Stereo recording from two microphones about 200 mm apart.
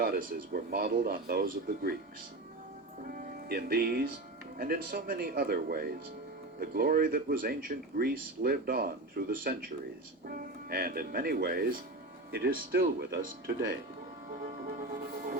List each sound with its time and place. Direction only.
0.0 s speech: 45° right (ahead or behind)
3.1 s speech: 45° right (ahead or behind)
14.7 s music: 40° right (ahead or behind)